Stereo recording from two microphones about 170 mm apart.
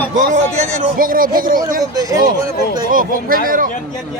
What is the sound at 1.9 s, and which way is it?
Speech, 20° right (ahead or behind).